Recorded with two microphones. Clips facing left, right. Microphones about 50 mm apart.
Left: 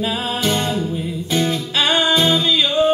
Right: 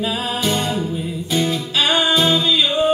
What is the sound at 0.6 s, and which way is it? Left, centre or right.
Music, centre.